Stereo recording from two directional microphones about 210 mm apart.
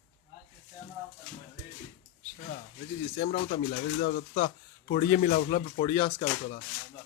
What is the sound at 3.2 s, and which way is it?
Speech, 40° left (ahead or behind).